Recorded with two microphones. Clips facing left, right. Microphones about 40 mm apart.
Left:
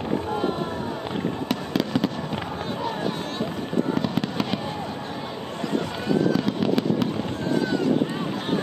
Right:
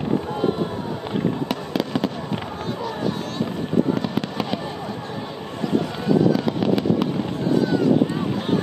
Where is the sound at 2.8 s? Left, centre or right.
Centre.